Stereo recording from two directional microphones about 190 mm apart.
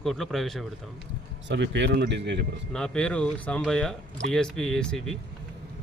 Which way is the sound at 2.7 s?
5° left (ahead or behind).